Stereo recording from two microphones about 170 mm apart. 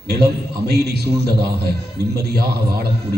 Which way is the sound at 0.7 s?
70° right (ahead or behind).